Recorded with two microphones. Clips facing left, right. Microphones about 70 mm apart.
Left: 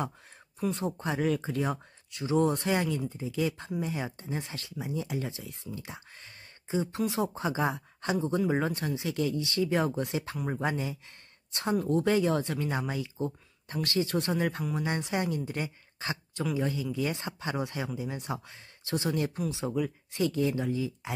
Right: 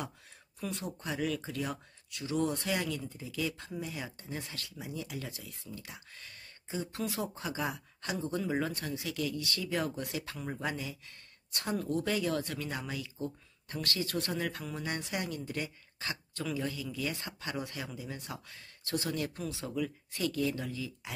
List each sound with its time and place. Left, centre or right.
0.6 s speech: left